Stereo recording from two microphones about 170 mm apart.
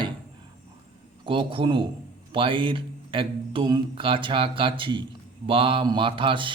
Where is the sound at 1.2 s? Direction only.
30° right (ahead or behind).